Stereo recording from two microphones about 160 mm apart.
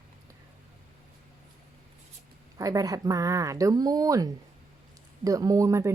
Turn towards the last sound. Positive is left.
turn(degrees=-20)  # may be behind; listen again after turning